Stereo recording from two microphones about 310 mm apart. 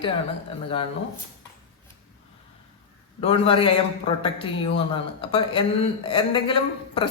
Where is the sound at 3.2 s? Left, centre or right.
Centre.